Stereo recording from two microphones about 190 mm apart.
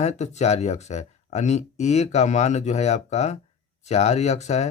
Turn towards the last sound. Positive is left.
turn(degrees=35)  # may be behind; listen again after turning